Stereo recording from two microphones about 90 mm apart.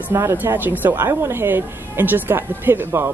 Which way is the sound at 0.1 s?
30° right (ahead or behind).